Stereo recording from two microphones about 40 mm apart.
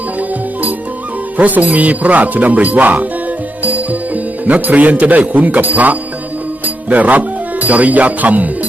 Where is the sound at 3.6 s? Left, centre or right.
Right.